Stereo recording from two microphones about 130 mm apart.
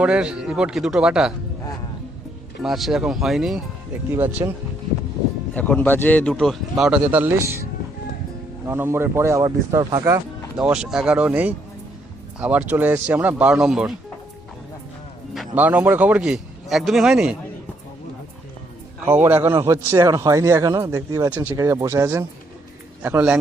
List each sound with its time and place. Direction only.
0.0 s speech: 10° right (ahead or behind)
2.6 s speech: centre (ahead or behind)
4.1 s speech: 15° right (ahead or behind)
5.5 s a man's voice: 15° left (ahead or behind); by 10.2 s 25° right (ahead or behind)
10.6 s speech: 5° right (ahead or behind)
15.5 s speech: 10° right (ahead or behind)
19.0 s a man's voice: 20° right (ahead or behind)
21.2 s a man's voice: 10° right (ahead or behind)